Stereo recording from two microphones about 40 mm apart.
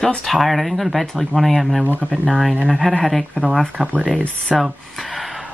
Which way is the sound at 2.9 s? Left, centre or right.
Centre.